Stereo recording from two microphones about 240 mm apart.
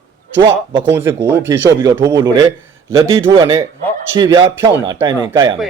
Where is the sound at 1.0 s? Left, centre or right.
Centre.